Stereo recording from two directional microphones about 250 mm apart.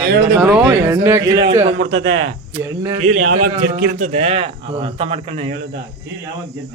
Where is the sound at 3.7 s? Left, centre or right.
Right.